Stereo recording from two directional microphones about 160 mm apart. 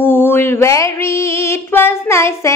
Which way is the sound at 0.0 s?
15° left (ahead or behind).